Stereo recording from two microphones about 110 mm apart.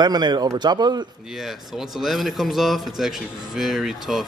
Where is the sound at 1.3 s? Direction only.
Centre (ahead or behind).